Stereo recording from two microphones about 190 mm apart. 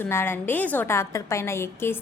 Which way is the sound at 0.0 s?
10° left (ahead or behind).